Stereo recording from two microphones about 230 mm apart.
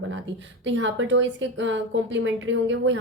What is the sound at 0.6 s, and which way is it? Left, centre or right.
Speech, right.